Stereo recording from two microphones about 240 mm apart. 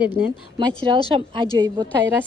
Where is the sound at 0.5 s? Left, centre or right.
Right.